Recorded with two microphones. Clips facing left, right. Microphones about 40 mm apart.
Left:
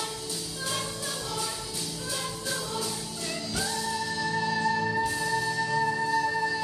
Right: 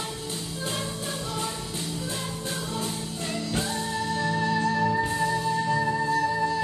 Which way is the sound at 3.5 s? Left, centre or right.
Right.